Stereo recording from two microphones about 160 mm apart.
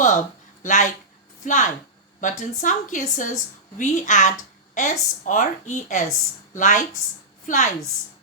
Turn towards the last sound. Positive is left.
turn(degrees=50)  # may be behind; listen again after turning